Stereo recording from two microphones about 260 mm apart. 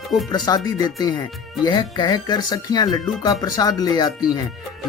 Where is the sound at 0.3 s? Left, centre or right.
Centre.